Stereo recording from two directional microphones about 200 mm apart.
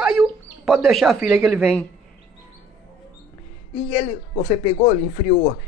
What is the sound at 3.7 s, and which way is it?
Speech, 30° left (ahead or behind).